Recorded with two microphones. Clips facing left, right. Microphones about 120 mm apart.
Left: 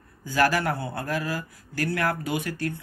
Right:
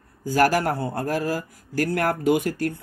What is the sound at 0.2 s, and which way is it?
Speech, 45° right (ahead or behind).